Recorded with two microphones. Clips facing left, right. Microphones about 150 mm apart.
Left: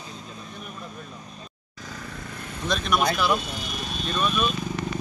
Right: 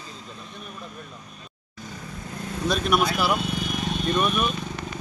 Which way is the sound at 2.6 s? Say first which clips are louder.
Right 1 dB; 5° right (ahead or behind).